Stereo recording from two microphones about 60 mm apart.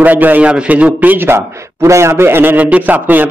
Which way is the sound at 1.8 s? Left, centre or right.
Right.